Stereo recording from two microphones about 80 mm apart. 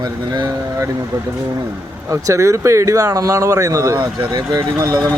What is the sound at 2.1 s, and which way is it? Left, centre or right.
Speech, right.